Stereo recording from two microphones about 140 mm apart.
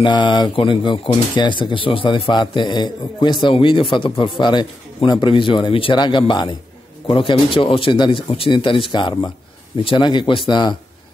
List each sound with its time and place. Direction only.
0.0 s speech: 35° left (ahead or behind)